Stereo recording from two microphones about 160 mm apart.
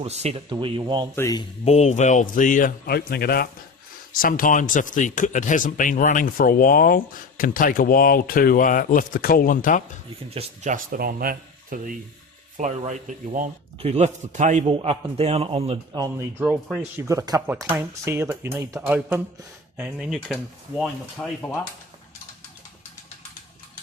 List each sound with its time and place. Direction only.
0.0 s speech: 40° right (ahead or behind)
0.5 s speech: 30° right (ahead or behind)
1.1 s speech: 15° left (ahead or behind)
1.6 s speech: 45° left (ahead or behind); by 3.5 s 75° left (ahead or behind)
4.1 s speech: 60° left (ahead or behind)
10.2 s speech: 40° right (ahead or behind); by 11.9 s 65° right (ahead or behind)
12.5 s speech: 50° right (ahead or behind)
13.7 s speech: 40° right (ahead or behind)
14.7 s speech: 35° right (ahead or behind)
16.4 s speech: 10° right (ahead or behind)
17.1 s speech: 20° right (ahead or behind); by 21.2 s centre (ahead or behind)